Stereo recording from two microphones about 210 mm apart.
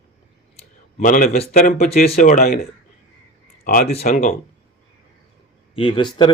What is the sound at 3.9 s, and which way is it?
Speech, 30° left (ahead or behind).